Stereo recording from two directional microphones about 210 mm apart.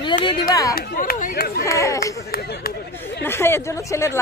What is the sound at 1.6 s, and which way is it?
Speech, 15° left (ahead or behind).